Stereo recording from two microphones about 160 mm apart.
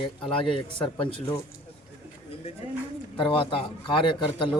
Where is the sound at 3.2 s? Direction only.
35° left (ahead or behind).